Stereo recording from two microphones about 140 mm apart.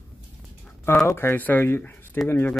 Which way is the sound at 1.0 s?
15° left (ahead or behind).